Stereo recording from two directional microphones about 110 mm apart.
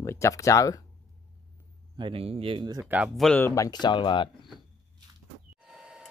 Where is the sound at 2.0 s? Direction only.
55° right (ahead or behind).